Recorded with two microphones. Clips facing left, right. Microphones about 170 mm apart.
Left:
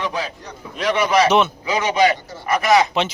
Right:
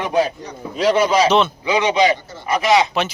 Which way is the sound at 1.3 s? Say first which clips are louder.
Right 1 dB; 15° left (ahead or behind).